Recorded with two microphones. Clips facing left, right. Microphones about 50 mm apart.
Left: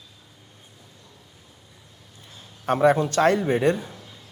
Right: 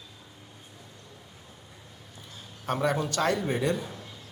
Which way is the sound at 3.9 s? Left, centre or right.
Centre.